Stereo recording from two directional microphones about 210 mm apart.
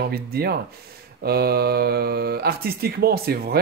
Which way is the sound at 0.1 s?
50° right (ahead or behind).